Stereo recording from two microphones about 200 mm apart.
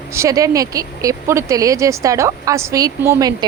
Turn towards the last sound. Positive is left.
turn(degrees=-15)  # may be behind; listen again after turning